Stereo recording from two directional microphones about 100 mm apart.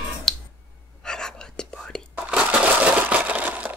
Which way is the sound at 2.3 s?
10° right (ahead or behind).